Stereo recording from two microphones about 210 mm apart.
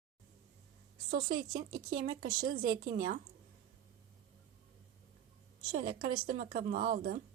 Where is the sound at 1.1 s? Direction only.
40° right (ahead or behind).